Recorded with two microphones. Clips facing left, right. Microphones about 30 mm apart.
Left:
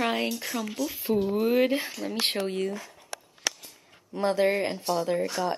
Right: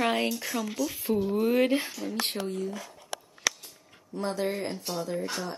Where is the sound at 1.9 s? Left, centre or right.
Left.